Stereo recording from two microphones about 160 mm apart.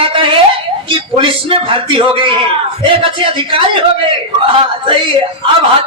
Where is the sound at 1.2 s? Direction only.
35° right (ahead or behind).